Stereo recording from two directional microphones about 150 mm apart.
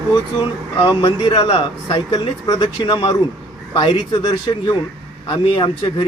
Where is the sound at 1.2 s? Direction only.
30° left (ahead or behind).